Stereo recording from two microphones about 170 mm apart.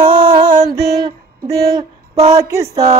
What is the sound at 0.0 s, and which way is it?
Music, 30° right (ahead or behind).